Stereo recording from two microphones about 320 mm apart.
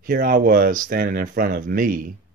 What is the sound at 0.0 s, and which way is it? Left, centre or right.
Speech, right.